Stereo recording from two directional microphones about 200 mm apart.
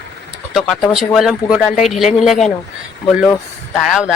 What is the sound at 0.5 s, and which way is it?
Speech, centre (ahead or behind).